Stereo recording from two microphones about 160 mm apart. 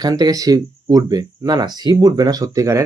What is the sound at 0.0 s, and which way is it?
Speech, 25° right (ahead or behind).